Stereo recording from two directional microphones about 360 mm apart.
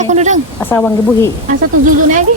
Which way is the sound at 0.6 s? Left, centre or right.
Centre.